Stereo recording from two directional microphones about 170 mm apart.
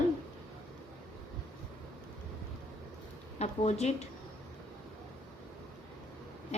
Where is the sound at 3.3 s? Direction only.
40° left (ahead or behind).